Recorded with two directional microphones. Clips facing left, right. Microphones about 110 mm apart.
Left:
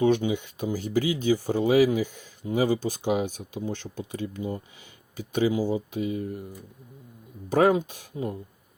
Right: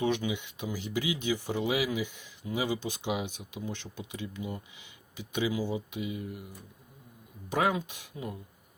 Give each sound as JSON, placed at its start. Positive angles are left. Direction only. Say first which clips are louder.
{"t": 0.0, "sound": "speech", "louder": "left 7 dB", "side_deg": 35}
{"t": 7.5, "sound": "speech", "louder": "left 8 dB", "side_deg": 40}